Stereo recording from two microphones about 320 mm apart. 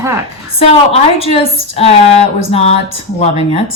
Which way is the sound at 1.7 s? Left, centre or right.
Centre.